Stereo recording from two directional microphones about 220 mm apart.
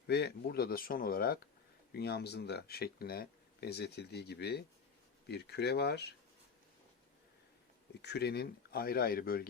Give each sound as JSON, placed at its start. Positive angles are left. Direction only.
{"t": 0.1, "sound": "speech", "side_deg": 50}
{"t": 8.0, "sound": "speech", "side_deg": 50}